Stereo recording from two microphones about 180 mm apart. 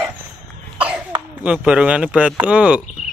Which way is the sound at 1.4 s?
5° right (ahead or behind).